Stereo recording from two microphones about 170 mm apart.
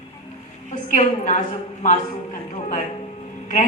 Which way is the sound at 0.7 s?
45° left (ahead or behind).